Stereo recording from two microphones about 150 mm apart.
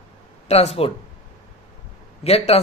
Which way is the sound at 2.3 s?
40° left (ahead or behind).